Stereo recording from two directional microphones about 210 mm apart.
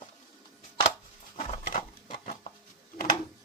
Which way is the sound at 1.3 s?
30° left (ahead or behind).